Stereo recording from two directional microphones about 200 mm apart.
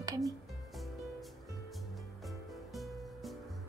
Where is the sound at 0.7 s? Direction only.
Centre (ahead or behind).